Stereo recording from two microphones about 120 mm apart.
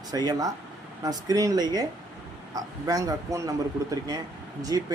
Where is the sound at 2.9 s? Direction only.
30° right (ahead or behind).